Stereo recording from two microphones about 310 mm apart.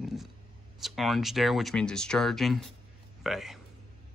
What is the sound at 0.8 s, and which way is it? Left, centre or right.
Speech, centre.